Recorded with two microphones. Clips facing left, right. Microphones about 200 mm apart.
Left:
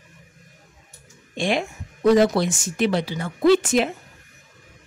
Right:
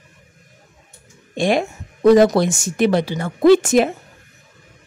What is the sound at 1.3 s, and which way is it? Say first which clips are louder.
A woman's voice: right 5 dB; 45° right (ahead or behind).